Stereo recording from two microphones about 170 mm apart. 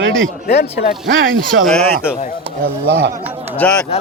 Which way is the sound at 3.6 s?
5° left (ahead or behind).